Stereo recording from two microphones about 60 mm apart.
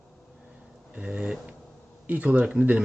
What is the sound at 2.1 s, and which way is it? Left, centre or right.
Speech, right.